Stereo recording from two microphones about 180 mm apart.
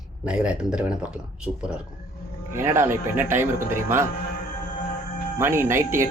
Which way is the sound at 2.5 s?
15° right (ahead or behind).